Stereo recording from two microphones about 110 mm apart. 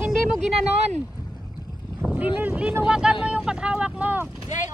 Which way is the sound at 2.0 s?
15° right (ahead or behind).